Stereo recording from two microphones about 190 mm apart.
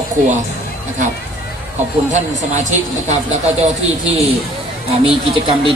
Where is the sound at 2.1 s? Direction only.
40° right (ahead or behind).